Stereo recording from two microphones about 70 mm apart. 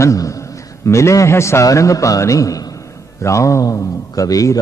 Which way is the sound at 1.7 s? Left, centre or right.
Left.